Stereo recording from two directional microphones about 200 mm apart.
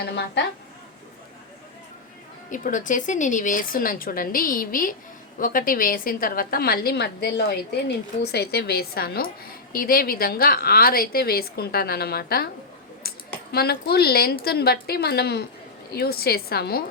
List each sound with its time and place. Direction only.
2.5 s a woman's voice: 40° left (ahead or behind)
13.0 s a sound: 50° left (ahead or behind)
14.4 s a woman's voice: 50° left (ahead or behind)